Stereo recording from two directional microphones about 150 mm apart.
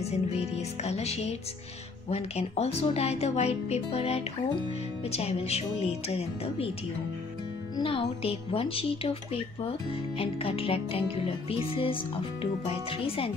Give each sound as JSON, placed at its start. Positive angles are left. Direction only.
{"t": 0.0, "sound": "speech", "side_deg": 45}
{"t": 7.7, "sound": "speech", "side_deg": 35}